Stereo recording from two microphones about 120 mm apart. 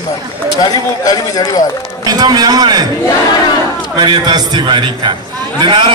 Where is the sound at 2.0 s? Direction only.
35° right (ahead or behind).